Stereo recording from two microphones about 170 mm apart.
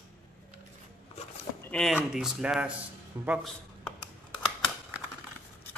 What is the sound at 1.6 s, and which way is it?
Speech, 5° left (ahead or behind).